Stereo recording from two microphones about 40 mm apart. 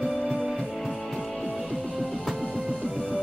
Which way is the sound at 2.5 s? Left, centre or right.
Right.